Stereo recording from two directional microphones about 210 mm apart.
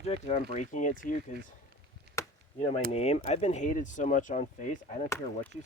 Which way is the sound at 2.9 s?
30° left (ahead or behind).